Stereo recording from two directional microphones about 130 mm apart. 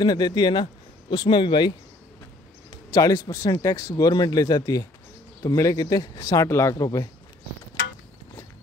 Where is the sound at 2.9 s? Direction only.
30° left (ahead or behind).